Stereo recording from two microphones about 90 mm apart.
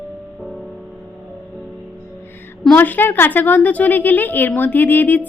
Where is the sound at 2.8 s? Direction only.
20° left (ahead or behind).